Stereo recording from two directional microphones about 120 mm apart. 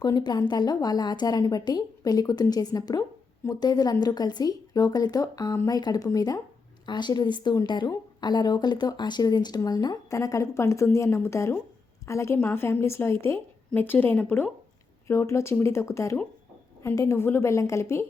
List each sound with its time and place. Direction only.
0.0 s a woman's voice: 35° left (ahead or behind); by 14.5 s 15° left (ahead or behind)
15.0 s a woman's voice: 25° left (ahead or behind)